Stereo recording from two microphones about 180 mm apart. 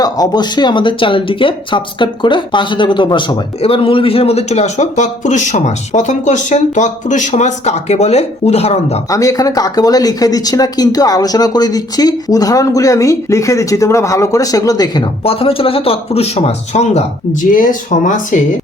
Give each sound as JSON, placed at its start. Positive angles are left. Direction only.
{"t": 0.0, "sound": "speech", "side_deg": 20}
{"t": 9.0, "sound": "speech", "side_deg": 20}
{"t": 15.2, "sound": "speech", "side_deg": 30}